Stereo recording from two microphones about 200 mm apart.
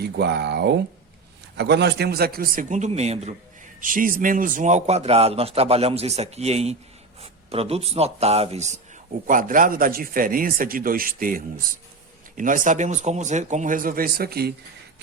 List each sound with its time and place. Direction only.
0.0 s speech: 55° right (ahead or behind); by 3.3 s 35° right (ahead or behind)
3.8 s a man's voice: 45° right (ahead or behind)